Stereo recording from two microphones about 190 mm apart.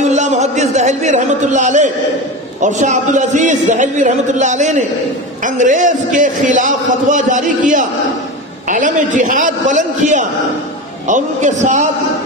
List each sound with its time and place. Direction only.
0.1 s a man's voice: 40° right (ahead or behind)